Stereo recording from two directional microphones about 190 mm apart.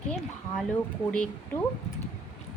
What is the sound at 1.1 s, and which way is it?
Speech, 5° left (ahead or behind).